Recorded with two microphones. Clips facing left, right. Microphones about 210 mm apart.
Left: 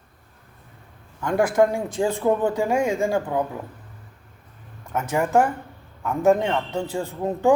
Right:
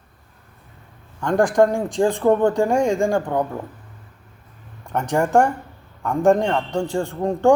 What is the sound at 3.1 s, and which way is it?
Speech, 45° right (ahead or behind).